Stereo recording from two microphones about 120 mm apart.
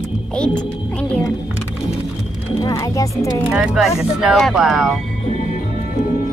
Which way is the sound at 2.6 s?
35° left (ahead or behind).